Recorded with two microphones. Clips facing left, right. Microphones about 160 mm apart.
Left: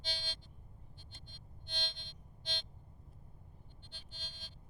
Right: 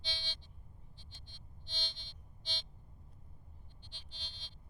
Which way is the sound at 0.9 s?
50° left (ahead or behind).